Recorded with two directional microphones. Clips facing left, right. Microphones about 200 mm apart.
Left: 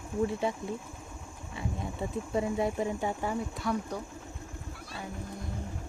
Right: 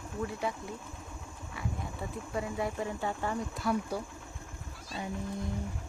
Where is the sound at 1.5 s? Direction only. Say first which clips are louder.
Left 3 dB; 25° left (ahead or behind).